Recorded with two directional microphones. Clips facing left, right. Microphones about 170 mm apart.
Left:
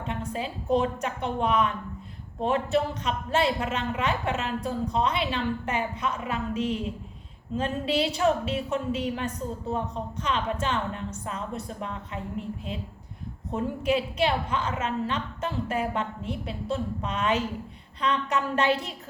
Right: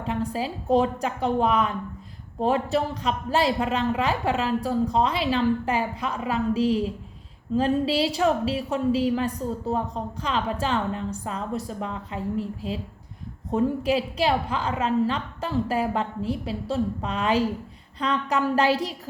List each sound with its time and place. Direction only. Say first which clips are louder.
0.0 s a woman's voice: right 4 dB; 35° right (ahead or behind)